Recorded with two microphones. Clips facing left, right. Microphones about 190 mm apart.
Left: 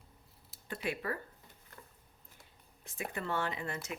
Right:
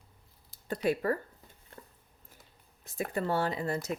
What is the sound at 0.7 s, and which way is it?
Speech, 40° right (ahead or behind).